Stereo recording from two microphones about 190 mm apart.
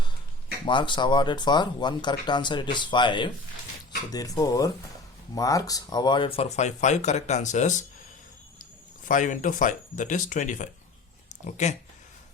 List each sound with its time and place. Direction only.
0.6 s speech: 25° left (ahead or behind); by 7.9 s 40° left (ahead or behind)
9.0 s speech: 40° left (ahead or behind)